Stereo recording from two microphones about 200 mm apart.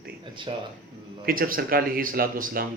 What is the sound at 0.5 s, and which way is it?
Speech, 30° right (ahead or behind).